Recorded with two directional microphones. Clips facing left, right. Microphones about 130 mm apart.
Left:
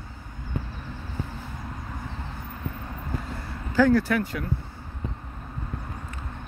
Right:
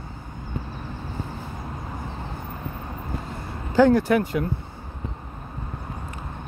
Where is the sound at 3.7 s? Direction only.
20° right (ahead or behind).